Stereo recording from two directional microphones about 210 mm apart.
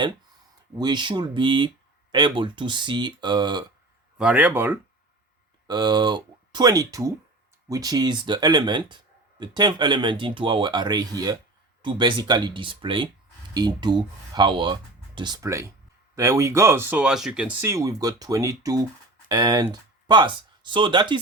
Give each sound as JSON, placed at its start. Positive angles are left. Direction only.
{"t": 0.8, "sound": "speech", "side_deg": -20}
{"t": 4.2, "sound": "speech", "side_deg": -5}
{"t": 5.6, "sound": "speech", "side_deg": -20}